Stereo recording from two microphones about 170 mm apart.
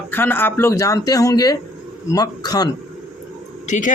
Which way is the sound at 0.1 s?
10° left (ahead or behind).